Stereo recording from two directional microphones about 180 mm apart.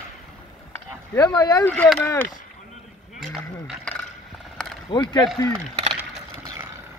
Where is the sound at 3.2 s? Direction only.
Centre (ahead or behind).